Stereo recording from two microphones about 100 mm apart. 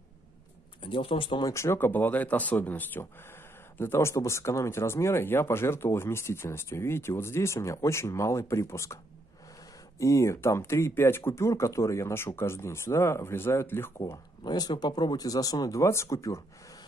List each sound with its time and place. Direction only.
0.8 s speech: 60° left (ahead or behind)
1.5 s speech: 30° left (ahead or behind)
14.1 s speech: 45° left (ahead or behind)